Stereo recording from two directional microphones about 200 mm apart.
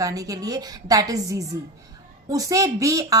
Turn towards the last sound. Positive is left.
turn(degrees=-15)  # may be behind; listen again after turning